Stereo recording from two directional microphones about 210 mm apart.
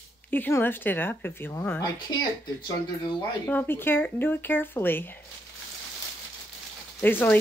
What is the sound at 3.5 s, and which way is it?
Speech, 10° left (ahead or behind).